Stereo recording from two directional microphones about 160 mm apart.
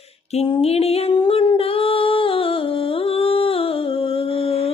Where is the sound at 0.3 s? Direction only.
35° left (ahead or behind).